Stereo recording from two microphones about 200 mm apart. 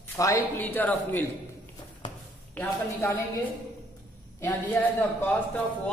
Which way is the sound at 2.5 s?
10° left (ahead or behind).